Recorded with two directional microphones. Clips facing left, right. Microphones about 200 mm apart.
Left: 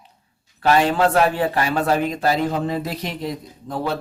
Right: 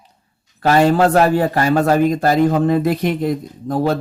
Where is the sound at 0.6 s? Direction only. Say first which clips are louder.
Right 4 dB; 45° right (ahead or behind).